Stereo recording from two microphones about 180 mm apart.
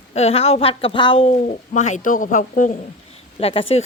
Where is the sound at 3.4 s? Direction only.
30° left (ahead or behind).